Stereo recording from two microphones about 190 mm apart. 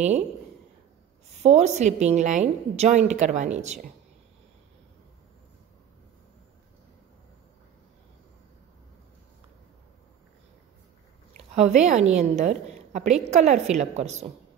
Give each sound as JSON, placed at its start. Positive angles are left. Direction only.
{"t": 1.4, "sound": "a woman's voice", "side_deg": -35}
{"t": 11.5, "sound": "a woman's voice", "side_deg": -35}